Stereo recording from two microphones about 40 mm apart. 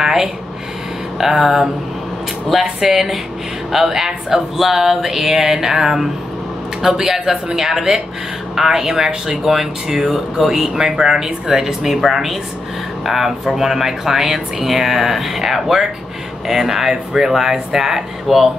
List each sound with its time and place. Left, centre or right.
0.0 s speech: centre